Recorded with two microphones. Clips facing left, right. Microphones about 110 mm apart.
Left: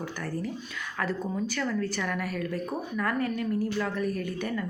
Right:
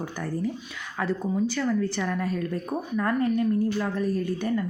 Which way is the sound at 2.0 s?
25° right (ahead or behind).